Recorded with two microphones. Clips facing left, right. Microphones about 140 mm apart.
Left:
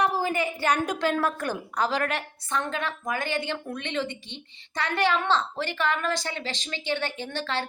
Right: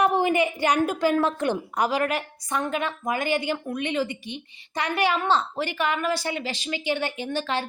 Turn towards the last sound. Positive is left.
turn(degrees=-15)  # may be behind; listen again after turning